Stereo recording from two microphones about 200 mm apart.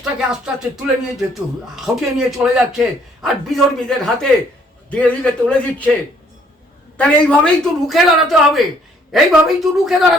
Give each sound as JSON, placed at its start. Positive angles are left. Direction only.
{"t": 0.0, "sound": "a man's voice", "side_deg": -5}
{"t": 6.9, "sound": "speech", "side_deg": 5}